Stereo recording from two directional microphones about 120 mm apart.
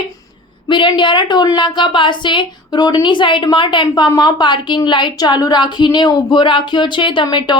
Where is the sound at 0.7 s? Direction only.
40° left (ahead or behind).